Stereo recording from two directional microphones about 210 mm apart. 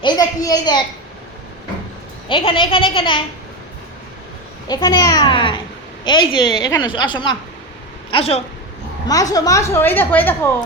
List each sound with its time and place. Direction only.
0.0 s a sound: 15° left (ahead or behind)
2.3 s a child's voice: 25° left (ahead or behind)
4.7 s a child's voice: 20° left (ahead or behind)
9.3 s a woman's voice: 15° left (ahead or behind)